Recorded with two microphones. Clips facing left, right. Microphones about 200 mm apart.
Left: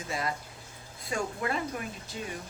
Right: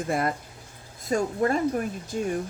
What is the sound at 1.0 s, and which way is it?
Speech, 40° right (ahead or behind).